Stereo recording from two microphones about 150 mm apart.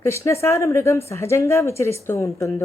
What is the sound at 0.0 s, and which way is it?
A woman's voice, 20° left (ahead or behind).